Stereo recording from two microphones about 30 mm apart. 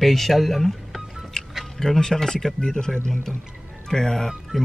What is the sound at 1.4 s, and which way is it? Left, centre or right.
Music, left.